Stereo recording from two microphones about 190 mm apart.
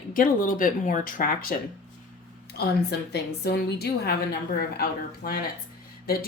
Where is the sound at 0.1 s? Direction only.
45° left (ahead or behind).